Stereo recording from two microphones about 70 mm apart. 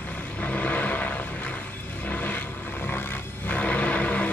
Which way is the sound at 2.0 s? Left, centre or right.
Left.